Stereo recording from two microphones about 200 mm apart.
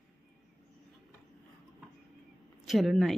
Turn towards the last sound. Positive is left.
turn(degrees=0)  # may be behind; listen again after turning